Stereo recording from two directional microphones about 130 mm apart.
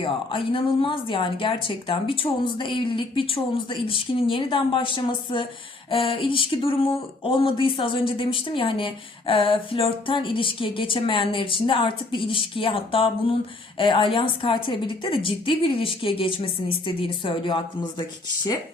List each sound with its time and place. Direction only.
0.0 s a woman's voice: 40° left (ahead or behind)